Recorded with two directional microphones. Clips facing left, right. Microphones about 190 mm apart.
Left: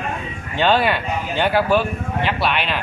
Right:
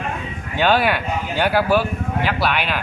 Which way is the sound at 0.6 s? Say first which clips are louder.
Even; 5° right (ahead or behind).